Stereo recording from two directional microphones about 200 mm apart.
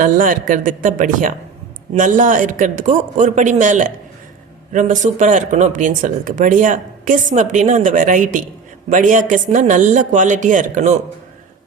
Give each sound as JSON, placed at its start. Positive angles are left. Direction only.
{"t": 0.0, "sound": "speech", "side_deg": -40}